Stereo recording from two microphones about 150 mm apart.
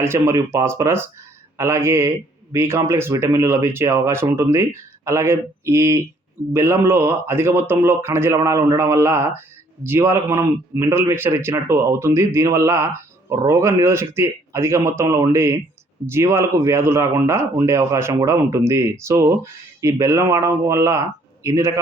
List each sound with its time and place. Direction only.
0.0 s a man's voice: 20° right (ahead or behind)